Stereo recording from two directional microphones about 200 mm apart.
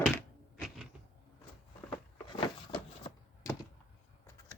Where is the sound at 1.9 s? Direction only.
25° left (ahead or behind).